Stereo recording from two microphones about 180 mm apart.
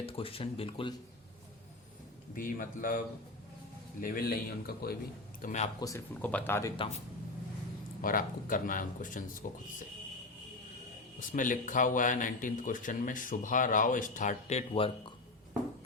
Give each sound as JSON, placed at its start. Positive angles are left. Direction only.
{"t": 0.0, "sound": "speech", "side_deg": 30}
{"t": 2.3, "sound": "speech", "side_deg": 50}
{"t": 4.0, "sound": "a man's voice", "side_deg": 50}
{"t": 5.4, "sound": "speech", "side_deg": 40}
{"t": 5.8, "sound": "speech", "side_deg": 15}
{"t": 8.0, "sound": "a man's voice", "side_deg": 50}
{"t": 11.3, "sound": "speech", "side_deg": 45}
{"t": 14.7, "sound": "speech", "side_deg": 30}